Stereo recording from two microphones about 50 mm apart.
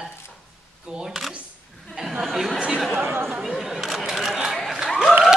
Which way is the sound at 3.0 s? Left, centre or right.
Right.